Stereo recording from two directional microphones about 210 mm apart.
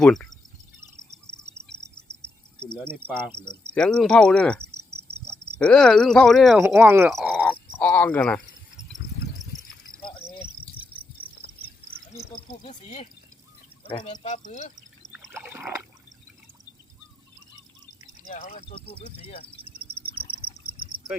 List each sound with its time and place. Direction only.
0.0 s speech: centre (ahead or behind)
2.8 s cricket: 10° right (ahead or behind)
3.8 s speech: 5° left (ahead or behind)
7.1 s cricket: centre (ahead or behind)
10.0 s cricket: 25° left (ahead or behind)
12.6 s speech: 30° left (ahead or behind)
14.3 s speech: 35° left (ahead or behind)
15.1 s a sound: 10° right (ahead or behind)
18.3 s speech: 35° left (ahead or behind)